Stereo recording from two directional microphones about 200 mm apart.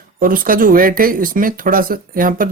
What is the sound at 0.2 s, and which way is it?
Speech, 45° right (ahead or behind).